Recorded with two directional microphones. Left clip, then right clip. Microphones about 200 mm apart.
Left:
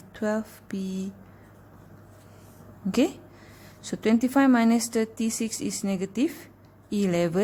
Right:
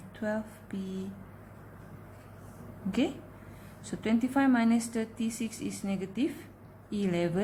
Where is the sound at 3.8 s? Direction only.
45° left (ahead or behind).